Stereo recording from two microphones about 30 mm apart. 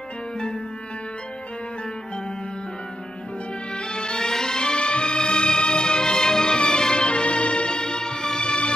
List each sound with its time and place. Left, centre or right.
3.7 s music: left
7.1 s music: left